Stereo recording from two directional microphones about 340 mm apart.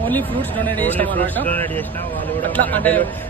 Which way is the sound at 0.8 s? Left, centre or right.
Centre.